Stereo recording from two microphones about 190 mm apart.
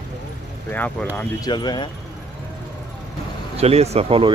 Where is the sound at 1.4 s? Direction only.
25° left (ahead or behind).